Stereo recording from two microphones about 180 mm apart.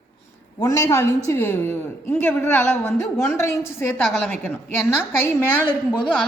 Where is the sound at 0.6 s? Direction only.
15° left (ahead or behind).